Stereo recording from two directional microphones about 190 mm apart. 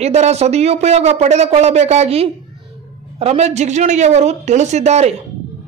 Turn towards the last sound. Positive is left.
turn(degrees=-35)  # may be behind; listen again after turning